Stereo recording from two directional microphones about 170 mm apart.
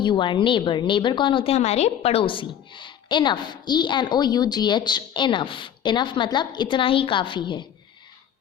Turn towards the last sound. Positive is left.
turn(degrees=25)  # may be behind; listen again after turning